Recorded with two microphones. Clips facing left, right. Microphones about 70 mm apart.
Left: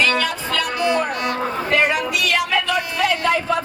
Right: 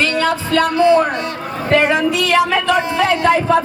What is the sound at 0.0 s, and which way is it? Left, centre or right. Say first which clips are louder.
Music: right 3 dB; right.